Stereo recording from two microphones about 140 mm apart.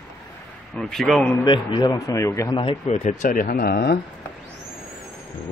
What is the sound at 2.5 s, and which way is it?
Speech, 40° left (ahead or behind).